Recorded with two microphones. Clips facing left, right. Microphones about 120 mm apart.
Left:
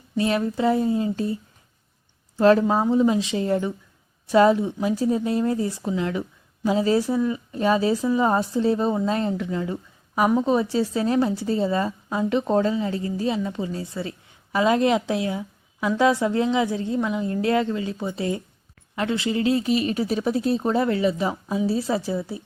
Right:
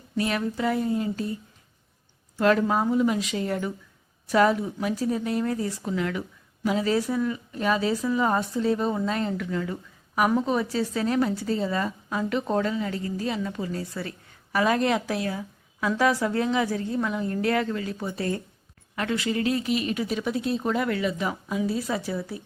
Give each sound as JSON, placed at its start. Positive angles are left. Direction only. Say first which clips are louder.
{"t": 0.2, "sound": "speech", "louder": "left 4 dB", "side_deg": 25}